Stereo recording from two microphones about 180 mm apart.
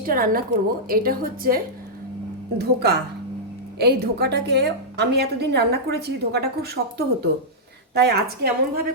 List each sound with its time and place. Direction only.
0.0 s a woman's voice: 50° right (ahead or behind)